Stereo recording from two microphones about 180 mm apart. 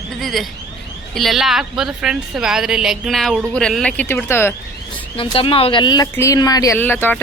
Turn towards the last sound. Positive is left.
turn(degrees=10)  # may be behind; listen again after turning